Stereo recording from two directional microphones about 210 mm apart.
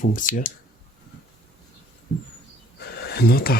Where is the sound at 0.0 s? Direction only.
40° left (ahead or behind).